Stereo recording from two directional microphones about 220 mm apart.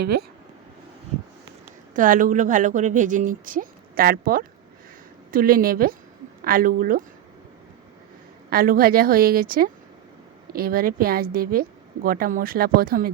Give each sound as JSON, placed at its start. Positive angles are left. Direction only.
{"t": 0.0, "sound": "speech", "side_deg": -45}
{"t": 1.9, "sound": "speech", "side_deg": -35}
{"t": 8.4, "sound": "speech", "side_deg": -40}